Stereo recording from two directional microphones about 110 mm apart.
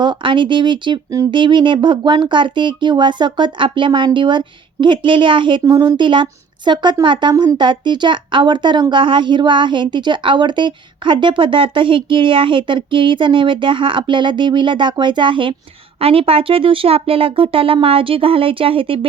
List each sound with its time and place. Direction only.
0.0 s speech: 45° right (ahead or behind)
5.6 s speech: 35° right (ahead or behind); by 18.9 s 55° right (ahead or behind)